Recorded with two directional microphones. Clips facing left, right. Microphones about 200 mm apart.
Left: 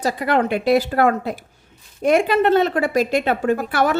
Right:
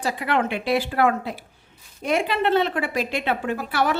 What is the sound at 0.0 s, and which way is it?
A woman's voice, 40° left (ahead or behind).